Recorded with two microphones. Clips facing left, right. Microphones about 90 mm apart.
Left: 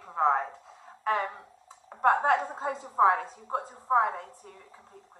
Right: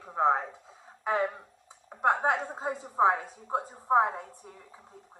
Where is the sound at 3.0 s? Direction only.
5° right (ahead or behind).